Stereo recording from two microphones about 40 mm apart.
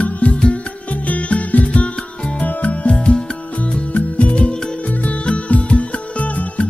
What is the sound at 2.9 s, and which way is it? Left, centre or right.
Music, left.